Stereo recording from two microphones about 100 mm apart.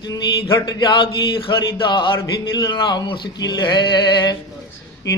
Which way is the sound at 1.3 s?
60° left (ahead or behind).